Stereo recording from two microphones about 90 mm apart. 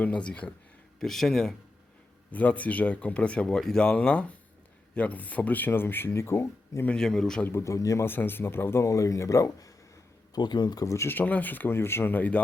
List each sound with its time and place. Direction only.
0.0 s speech: 15° left (ahead or behind)
2.3 s speech: 15° left (ahead or behind)
6.8 s speech: 10° left (ahead or behind)
7.4 s speech: 30° left (ahead or behind)
10.3 s speech: 55° left (ahead or behind)
10.8 s speech: 30° left (ahead or behind)